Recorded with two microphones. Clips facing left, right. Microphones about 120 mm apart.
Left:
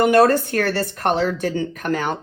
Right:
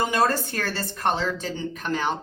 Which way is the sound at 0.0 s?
60° left (ahead or behind).